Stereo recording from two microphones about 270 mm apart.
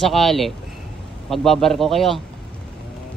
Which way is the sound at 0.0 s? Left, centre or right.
Centre.